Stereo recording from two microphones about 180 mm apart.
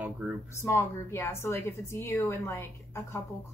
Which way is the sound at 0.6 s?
15° left (ahead or behind).